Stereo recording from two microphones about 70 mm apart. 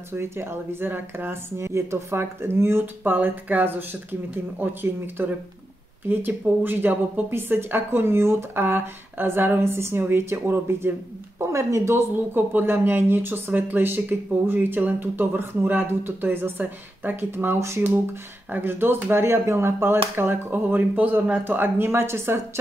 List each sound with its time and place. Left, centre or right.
0.1 s speech: right
12.4 s speech: right